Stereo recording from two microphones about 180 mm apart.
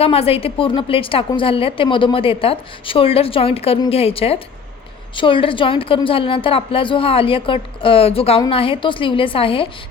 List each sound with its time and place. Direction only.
0.0 s a woman's voice: 35° left (ahead or behind)